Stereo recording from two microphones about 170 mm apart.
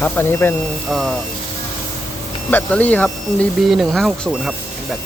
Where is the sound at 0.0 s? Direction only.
15° left (ahead or behind).